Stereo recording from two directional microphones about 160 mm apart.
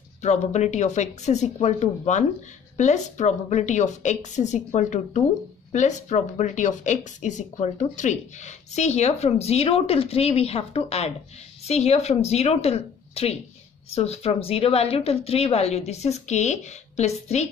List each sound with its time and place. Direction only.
0.2 s a woman's voice: 45° left (ahead or behind)